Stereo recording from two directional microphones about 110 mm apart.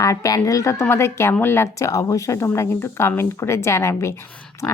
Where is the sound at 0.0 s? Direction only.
30° left (ahead or behind).